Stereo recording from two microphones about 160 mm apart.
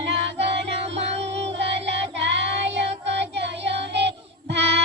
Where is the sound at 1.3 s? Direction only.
90° right.